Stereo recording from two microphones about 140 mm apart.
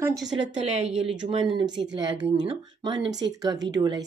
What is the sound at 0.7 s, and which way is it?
Speech, 50° right (ahead or behind).